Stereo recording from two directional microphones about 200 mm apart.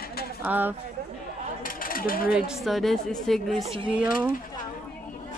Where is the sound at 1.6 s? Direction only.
45° left (ahead or behind).